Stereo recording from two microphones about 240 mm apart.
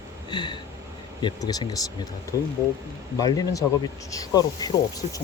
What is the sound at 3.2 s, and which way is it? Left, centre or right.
Speech, centre.